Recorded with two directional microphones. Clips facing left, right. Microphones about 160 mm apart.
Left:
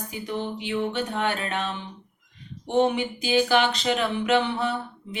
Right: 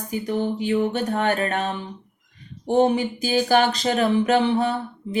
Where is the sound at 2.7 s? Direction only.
40° right (ahead or behind).